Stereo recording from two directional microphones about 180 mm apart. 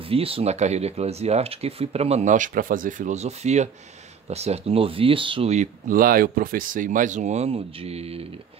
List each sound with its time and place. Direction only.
0.0 s speech: 30° right (ahead or behind)